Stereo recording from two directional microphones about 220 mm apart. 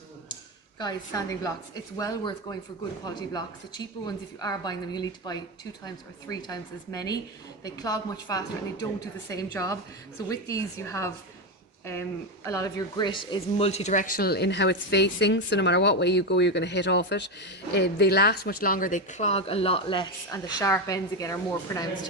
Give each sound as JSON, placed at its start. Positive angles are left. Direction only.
{"t": 0.8, "sound": "a woman's voice", "side_deg": 15}
{"t": 12.5, "sound": "speech", "side_deg": 15}